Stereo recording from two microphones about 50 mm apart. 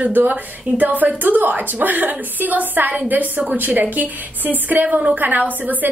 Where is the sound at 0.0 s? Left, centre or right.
Right.